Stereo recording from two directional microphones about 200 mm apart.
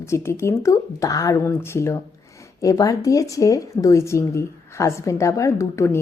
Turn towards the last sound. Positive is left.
turn(degrees=15)  # may be behind; listen again after turning